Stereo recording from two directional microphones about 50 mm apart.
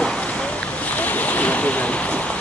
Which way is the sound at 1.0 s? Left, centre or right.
Left.